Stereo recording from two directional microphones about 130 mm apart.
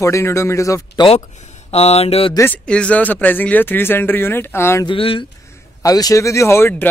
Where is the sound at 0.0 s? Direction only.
20° left (ahead or behind).